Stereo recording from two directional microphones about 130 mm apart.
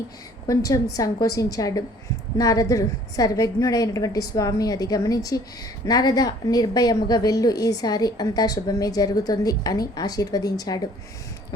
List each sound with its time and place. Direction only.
0.4 s a woman's voice: 25° left (ahead or behind)